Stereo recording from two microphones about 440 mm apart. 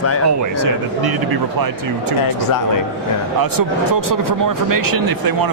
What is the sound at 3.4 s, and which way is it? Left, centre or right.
Speech, right.